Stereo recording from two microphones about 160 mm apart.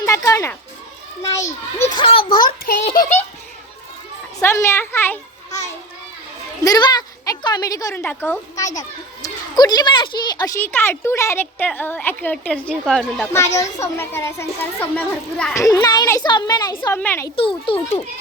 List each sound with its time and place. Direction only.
0.0 s speech: 20° left (ahead or behind)
1.8 s a woman's voice: 25° left (ahead or behind)
2.4 s a sound: 65° left (ahead or behind)
4.4 s a child's voice: 20° left (ahead or behind)
5.5 s children playing: 45° left (ahead or behind)
6.7 s a woman's voice: 25° left (ahead or behind); by 13.2 s centre (ahead or behind)
13.3 s a child's voice: 20° left (ahead or behind)
15.5 s a woman's voice: 20° left (ahead or behind)
17.0 s a child's voice: 15° left (ahead or behind)
17.3 s a child's voice: 35° left (ahead or behind)